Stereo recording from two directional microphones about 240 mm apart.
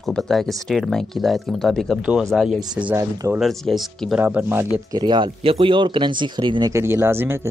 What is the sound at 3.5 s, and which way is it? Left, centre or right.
Speech, centre.